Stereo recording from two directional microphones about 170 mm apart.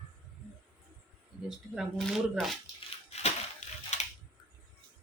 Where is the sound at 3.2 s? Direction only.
40° left (ahead or behind).